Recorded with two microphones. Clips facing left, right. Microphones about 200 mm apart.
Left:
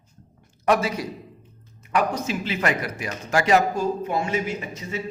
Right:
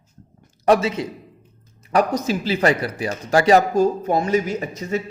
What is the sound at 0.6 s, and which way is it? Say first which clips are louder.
Speech: right 4 dB; 30° right (ahead or behind).